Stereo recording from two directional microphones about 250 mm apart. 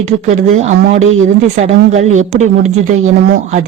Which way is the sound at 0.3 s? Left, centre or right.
Right.